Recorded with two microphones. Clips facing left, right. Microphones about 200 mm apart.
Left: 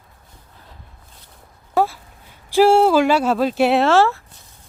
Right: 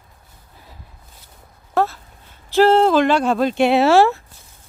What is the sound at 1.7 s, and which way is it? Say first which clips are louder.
Dog: left 1 dB; 10° left (ahead or behind).